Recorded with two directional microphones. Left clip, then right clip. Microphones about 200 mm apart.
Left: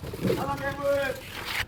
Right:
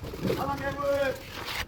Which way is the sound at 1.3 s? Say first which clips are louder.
Left 3 dB; 15° right (ahead or behind).